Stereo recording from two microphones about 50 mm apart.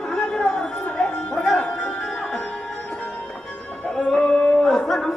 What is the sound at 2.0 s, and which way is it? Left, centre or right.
Music, centre.